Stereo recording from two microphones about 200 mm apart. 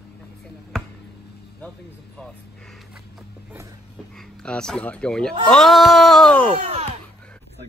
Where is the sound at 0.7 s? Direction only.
Centre (ahead or behind).